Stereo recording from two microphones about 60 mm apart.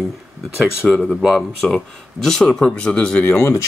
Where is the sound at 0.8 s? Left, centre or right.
Centre.